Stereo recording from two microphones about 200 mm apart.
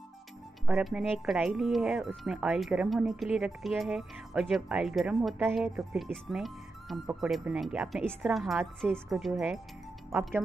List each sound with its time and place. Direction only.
0.7 s speech: 5° right (ahead or behind)